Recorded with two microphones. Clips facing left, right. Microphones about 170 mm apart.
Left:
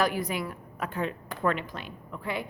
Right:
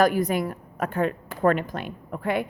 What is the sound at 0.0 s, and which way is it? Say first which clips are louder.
A woman's voice: right 7 dB; 45° right (ahead or behind).